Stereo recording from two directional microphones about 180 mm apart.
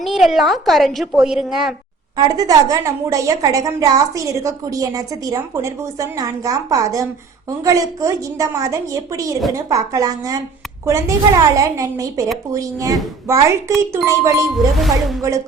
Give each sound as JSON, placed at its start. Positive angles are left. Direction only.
{"t": 0.0, "sound": "a woman's voice", "side_deg": 0}
{"t": 2.1, "sound": "a woman's voice", "side_deg": -20}
{"t": 14.8, "sound": "a woman's voice", "side_deg": 0}